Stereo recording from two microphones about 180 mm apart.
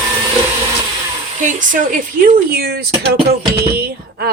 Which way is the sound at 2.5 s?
60° right (ahead or behind).